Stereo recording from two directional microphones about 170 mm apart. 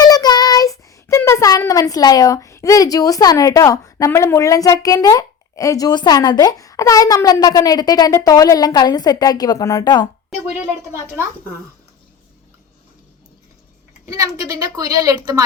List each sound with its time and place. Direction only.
0.0 s child singing: 25° left (ahead or behind)
14.0 s a woman's voice: 20° right (ahead or behind)